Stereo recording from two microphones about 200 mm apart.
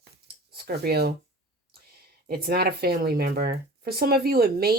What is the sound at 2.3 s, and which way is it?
Speech, 50° right (ahead or behind).